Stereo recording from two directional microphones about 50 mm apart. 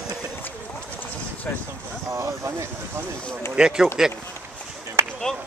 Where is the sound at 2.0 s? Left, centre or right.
Right.